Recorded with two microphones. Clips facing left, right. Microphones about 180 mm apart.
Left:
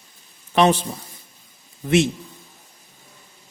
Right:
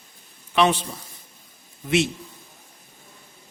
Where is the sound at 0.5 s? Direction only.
40° left (ahead or behind).